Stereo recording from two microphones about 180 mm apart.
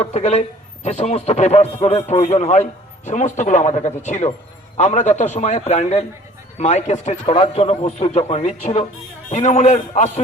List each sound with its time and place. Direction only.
0.0 s a man's voice: 40° left (ahead or behind)